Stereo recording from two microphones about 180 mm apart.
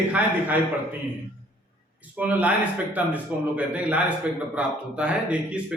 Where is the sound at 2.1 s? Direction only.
10° right (ahead or behind).